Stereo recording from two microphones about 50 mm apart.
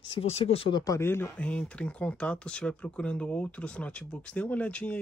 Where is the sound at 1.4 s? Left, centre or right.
Left.